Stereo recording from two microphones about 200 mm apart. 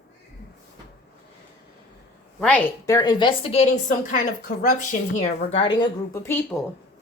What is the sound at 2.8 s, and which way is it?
A woman's voice, 15° left (ahead or behind).